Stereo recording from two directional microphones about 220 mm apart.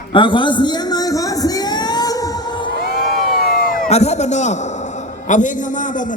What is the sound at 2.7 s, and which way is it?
Crowd, 40° left (ahead or behind).